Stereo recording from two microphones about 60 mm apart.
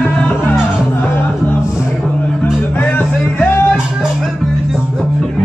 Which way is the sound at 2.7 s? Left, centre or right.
Left.